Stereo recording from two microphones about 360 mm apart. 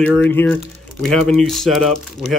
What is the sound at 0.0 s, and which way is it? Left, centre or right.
Speech, centre.